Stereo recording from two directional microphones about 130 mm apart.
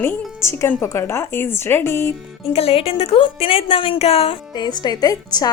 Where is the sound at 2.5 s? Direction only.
45° left (ahead or behind).